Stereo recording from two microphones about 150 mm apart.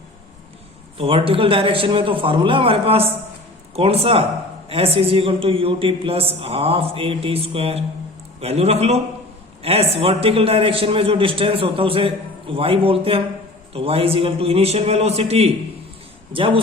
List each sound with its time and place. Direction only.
0.9 s a man's voice: 40° right (ahead or behind)